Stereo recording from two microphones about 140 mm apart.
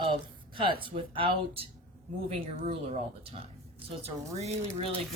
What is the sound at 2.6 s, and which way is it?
Speech, 50° right (ahead or behind).